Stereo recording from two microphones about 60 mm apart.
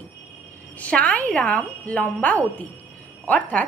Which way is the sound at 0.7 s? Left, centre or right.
Left.